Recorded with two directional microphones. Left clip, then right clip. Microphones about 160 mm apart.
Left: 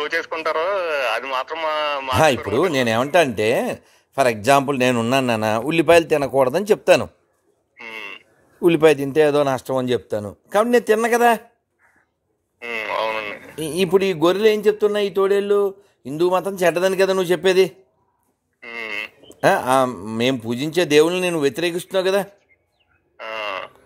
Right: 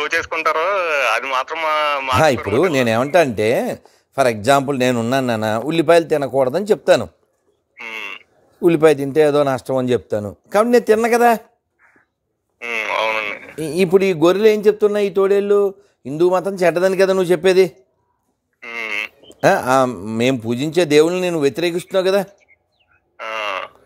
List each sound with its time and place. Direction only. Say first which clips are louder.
0.0 s speech: right 4 dB; 5° left (ahead or behind)
2.5 s speech: right 3 dB; 20° right (ahead or behind)
7.7 s frog: right 4 dB; 5° left (ahead or behind)
8.5 s speech: right 2 dB; 10° right (ahead or behind)
12.5 s a sound: right 4 dB; 5° left (ahead or behind)
13.6 s speech: right 3 dB; 20° right (ahead or behind)
18.6 s frog: right 4 dB; 5° left (ahead or behind)
19.4 s speech: right 2 dB; 20° right (ahead or behind)
23.1 s frog: right 4 dB; 5° left (ahead or behind)